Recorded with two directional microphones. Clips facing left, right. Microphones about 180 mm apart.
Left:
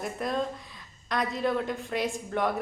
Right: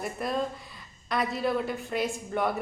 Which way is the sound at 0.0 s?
5° right (ahead or behind).